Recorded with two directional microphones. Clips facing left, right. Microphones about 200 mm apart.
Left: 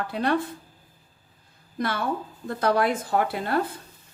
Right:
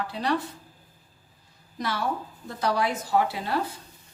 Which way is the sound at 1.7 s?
55° left (ahead or behind).